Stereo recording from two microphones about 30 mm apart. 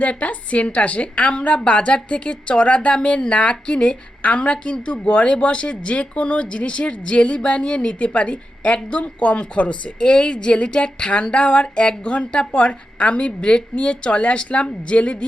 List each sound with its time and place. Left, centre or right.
0.0 s a woman's voice: left
9.4 s a woman's voice: left